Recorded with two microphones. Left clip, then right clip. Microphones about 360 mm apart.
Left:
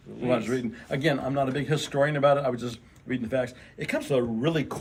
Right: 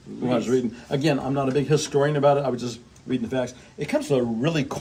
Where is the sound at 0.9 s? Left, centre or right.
Centre.